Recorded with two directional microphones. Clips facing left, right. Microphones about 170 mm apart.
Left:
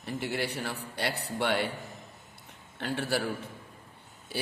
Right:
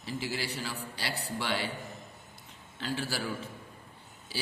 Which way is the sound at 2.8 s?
60° left (ahead or behind).